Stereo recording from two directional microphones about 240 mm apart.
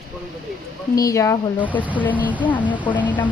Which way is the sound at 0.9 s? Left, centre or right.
Centre.